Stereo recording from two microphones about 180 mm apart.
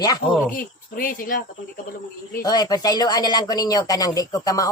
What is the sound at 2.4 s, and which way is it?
Speech, 20° left (ahead or behind).